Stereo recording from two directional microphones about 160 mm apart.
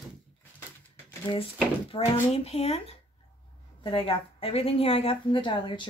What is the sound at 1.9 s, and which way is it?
Speech, 35° left (ahead or behind).